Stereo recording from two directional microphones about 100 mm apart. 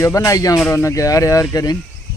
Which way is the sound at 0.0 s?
30° left (ahead or behind).